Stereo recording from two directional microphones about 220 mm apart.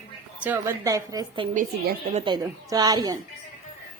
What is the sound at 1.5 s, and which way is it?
Speech, 35° right (ahead or behind).